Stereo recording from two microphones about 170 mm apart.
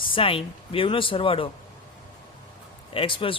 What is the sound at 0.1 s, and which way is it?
Speech, 30° left (ahead or behind).